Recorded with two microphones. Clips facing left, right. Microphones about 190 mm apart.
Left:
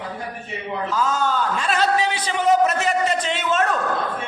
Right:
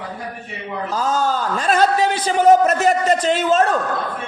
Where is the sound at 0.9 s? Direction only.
40° right (ahead or behind).